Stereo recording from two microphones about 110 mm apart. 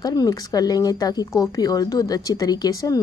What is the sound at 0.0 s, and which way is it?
A woman's voice, 35° left (ahead or behind).